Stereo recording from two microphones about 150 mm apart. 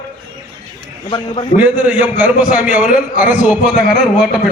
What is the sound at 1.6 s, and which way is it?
A man's voice, 10° right (ahead or behind).